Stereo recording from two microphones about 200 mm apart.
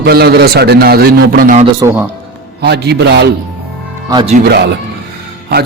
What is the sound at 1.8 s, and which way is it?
Speech, 10° right (ahead or behind).